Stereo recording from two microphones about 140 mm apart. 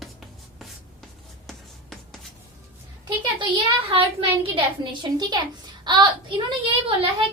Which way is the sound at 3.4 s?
40° right (ahead or behind).